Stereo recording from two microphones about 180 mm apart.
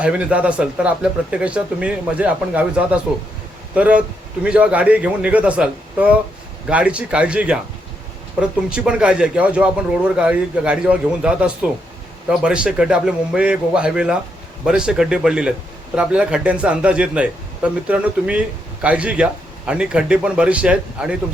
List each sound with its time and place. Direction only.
0.0 s a man's voice: 5° right (ahead or behind)